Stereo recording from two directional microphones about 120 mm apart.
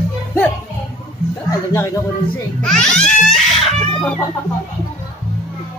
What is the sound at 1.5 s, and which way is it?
Speech, 25° left (ahead or behind).